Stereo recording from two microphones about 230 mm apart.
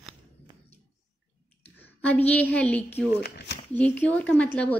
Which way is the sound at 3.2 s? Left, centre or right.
Left.